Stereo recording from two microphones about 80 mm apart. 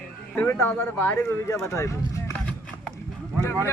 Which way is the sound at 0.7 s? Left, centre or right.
Centre.